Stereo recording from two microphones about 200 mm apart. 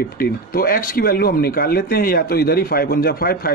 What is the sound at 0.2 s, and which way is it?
Speech, 45° left (ahead or behind).